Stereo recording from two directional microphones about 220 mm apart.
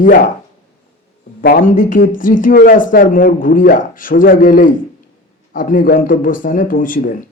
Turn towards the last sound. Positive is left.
turn(degrees=40)  # may be behind; listen again after turning